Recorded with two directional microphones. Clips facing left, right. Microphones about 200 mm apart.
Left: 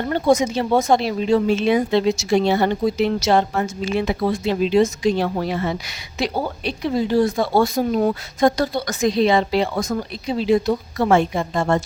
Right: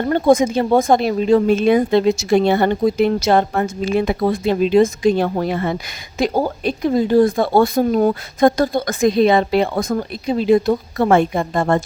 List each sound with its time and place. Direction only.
0.1 s speech: 55° right (ahead or behind)